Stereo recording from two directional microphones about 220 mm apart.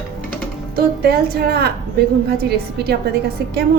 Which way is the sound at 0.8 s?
45° right (ahead or behind).